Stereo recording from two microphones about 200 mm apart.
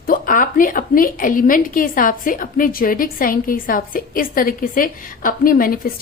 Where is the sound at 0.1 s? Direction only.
45° left (ahead or behind).